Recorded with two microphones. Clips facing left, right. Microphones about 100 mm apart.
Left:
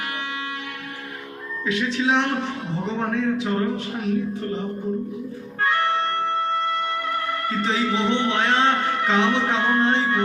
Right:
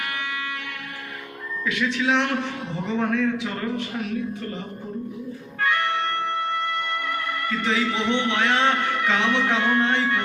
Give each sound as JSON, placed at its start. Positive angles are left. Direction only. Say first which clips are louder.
{"t": 1.6, "sound": "a man's voice", "louder": "left 1 dB", "side_deg": 30}
{"t": 5.5, "sound": "music", "louder": "left 2 dB", "side_deg": 35}
{"t": 7.4, "sound": "a man's voice", "louder": "even", "side_deg": 35}